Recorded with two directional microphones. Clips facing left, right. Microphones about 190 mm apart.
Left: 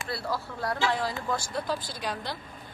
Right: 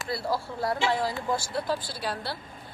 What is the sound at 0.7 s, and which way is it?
Speech, 25° right (ahead or behind).